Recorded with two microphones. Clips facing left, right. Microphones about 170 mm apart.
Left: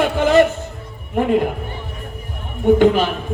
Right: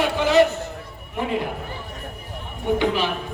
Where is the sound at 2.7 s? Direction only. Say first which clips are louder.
Left 7 dB; 50° left (ahead or behind).